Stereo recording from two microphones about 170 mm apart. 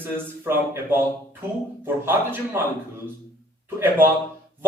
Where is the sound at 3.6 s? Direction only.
10° right (ahead or behind).